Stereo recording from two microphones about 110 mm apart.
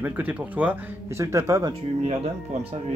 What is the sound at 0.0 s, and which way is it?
Speech, 15° right (ahead or behind).